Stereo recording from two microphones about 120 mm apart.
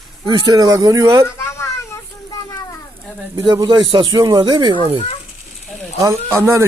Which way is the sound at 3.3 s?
35° right (ahead or behind).